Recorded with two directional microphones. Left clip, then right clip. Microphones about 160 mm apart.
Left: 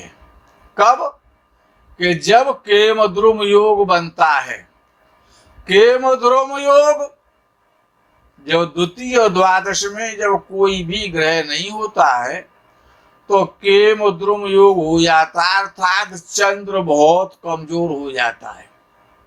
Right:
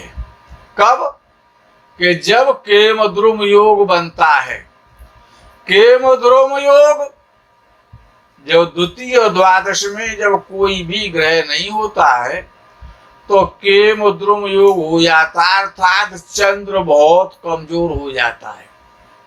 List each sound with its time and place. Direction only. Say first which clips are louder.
0.8 s speech: right 2 dB; 45° left (ahead or behind)
5.6 s speech: right 3 dB; 45° left (ahead or behind)
8.4 s speech: right 5 dB; 45° left (ahead or behind)